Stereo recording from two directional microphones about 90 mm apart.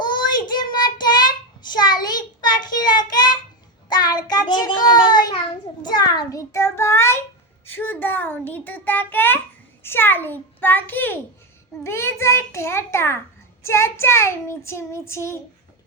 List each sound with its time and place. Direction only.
0.0 s child singing: 55° left (ahead or behind)
5.8 s a sound: 55° left (ahead or behind)
6.5 s a child's voice: 30° left (ahead or behind)
7.7 s a child's voice: 20° left (ahead or behind)